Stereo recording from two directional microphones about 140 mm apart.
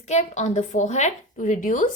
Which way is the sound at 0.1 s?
55° left (ahead or behind).